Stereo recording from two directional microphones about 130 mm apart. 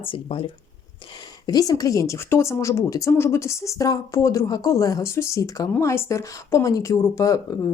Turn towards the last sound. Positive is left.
turn(degrees=25)  # may be behind; listen again after turning